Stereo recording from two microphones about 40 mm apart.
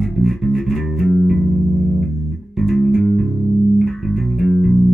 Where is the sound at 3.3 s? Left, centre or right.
Left.